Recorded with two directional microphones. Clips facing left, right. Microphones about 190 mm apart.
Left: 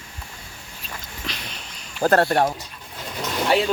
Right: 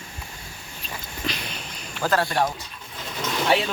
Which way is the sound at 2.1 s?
55° left (ahead or behind).